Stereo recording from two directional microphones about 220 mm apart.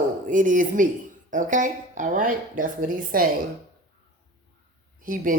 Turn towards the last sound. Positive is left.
turn(degrees=-40)  # may be behind; listen again after turning